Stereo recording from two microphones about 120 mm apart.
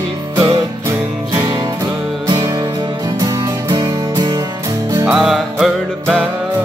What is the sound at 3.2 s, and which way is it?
Music, 35° right (ahead or behind).